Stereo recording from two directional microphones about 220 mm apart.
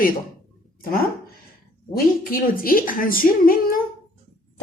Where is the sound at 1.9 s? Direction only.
40° left (ahead or behind).